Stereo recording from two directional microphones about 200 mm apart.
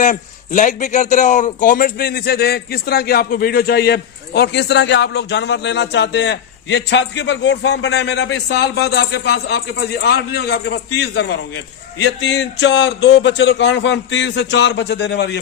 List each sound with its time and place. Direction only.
0.0 s a man's voice: 40° left (ahead or behind); by 15.4 s 60° left (ahead or behind)